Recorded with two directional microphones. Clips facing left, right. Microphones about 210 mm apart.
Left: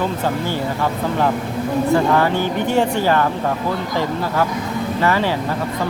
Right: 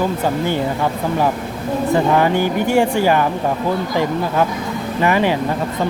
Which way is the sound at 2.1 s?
15° right (ahead or behind).